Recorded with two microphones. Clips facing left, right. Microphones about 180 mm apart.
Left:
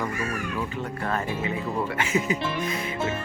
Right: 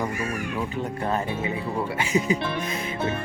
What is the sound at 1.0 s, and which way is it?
Speech, 20° right (ahead or behind).